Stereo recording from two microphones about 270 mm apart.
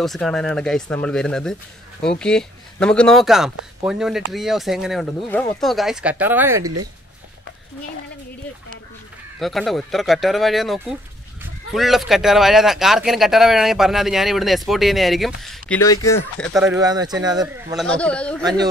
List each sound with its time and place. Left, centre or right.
0.0 s speech: centre
6.6 s speech: right
9.4 s speech: centre
15.8 s speech: centre
16.3 s speech: centre
16.8 s speech: centre
17.7 s speech: centre